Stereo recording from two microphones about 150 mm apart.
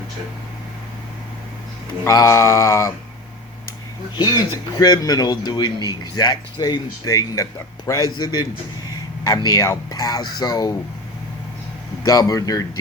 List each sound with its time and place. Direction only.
2.0 s speech: 20° left (ahead or behind)
4.2 s speech: 25° left (ahead or behind)
12.0 s speech: 25° left (ahead or behind)